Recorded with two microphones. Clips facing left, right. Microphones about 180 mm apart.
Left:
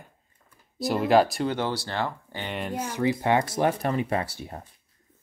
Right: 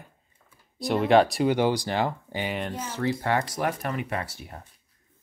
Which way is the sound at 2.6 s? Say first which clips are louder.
Left 2 dB; 5° left (ahead or behind).